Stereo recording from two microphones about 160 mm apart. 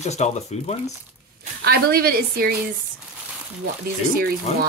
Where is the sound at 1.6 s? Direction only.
75° right (ahead or behind).